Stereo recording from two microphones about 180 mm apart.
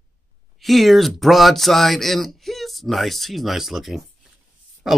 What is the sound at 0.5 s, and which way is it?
Speech, centre (ahead or behind).